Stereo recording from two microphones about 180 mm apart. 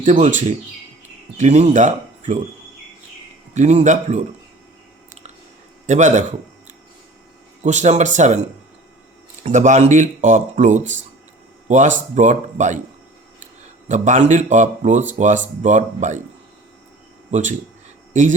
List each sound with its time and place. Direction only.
0.0 s speech: 45° right (ahead or behind)
3.5 s speech: 40° right (ahead or behind)
5.8 s a man's voice: 40° right (ahead or behind)
7.6 s speech: 40° right (ahead or behind)
9.4 s speech: 40° right (ahead or behind)
13.8 s speech: 40° right (ahead or behind)
18.1 s speech: 45° right (ahead or behind)